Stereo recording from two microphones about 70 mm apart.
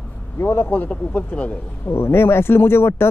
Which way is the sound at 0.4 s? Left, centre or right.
Left.